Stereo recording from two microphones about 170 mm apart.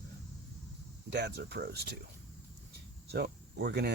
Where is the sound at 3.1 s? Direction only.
75° right (ahead or behind).